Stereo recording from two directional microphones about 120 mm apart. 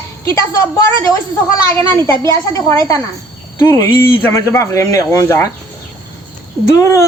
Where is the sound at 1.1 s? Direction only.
25° left (ahead or behind).